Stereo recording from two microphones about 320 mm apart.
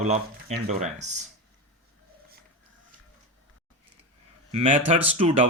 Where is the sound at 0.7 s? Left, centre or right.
Right.